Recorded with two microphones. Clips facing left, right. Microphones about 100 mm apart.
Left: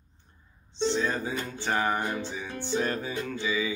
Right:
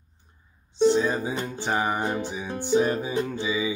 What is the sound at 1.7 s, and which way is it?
Music, 15° right (ahead or behind).